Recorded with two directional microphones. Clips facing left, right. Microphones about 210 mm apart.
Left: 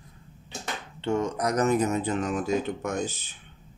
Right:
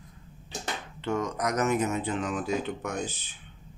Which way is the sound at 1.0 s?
30° left (ahead or behind).